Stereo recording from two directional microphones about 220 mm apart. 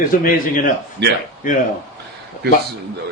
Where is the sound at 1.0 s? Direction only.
50° right (ahead or behind).